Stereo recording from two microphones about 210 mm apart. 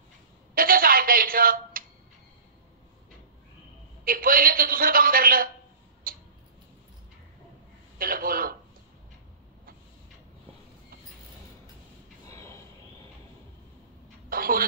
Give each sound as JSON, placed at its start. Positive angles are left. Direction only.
{"t": 0.6, "sound": "a sound", "side_deg": -45}
{"t": 4.0, "sound": "a man's voice", "side_deg": -45}
{"t": 6.0, "sound": "tick-tock", "side_deg": -45}
{"t": 8.0, "sound": "a man's voice", "side_deg": -45}
{"t": 12.3, "sound": "a sound", "side_deg": 15}
{"t": 14.3, "sound": "speech", "side_deg": -45}